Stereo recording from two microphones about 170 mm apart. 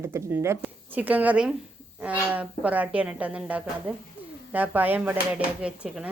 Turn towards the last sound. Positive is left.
turn(degrees=-5)  # may be behind; listen again after turning